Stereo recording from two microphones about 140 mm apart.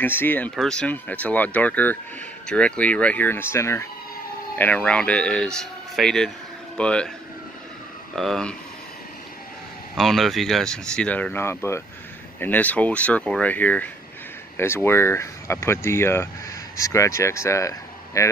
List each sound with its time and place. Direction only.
0.0 s speech: 15° left (ahead or behind)
8.2 s speech: 5° left (ahead or behind)
9.9 s speech: centre (ahead or behind); by 18.3 s 20° left (ahead or behind)